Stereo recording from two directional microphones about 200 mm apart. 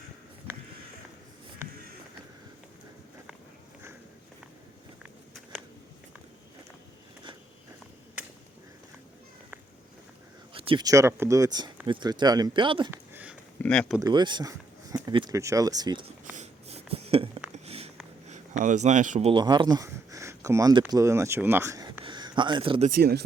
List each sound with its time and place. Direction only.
10.5 s speech: 25° right (ahead or behind)
12.9 s a sound: 10° right (ahead or behind)
13.6 s speech: 5° left (ahead or behind)
14.0 s speech: 20° right (ahead or behind)
16.3 s a sound: 35° right (ahead or behind)
18.3 s speech: 35° right (ahead or behind)
19.3 s speech: 20° right (ahead or behind)
22.9 s speech: 50° right (ahead or behind)